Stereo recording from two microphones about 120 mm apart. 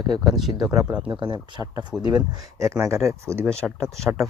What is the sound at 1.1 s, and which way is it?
Speech, 45° right (ahead or behind).